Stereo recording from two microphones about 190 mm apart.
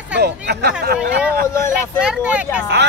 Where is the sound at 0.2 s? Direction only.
60° right (ahead or behind).